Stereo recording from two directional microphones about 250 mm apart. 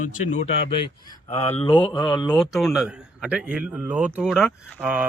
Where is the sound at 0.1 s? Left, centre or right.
Left.